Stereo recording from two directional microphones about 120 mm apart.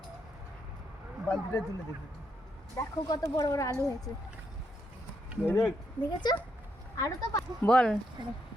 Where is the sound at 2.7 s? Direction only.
30° left (ahead or behind).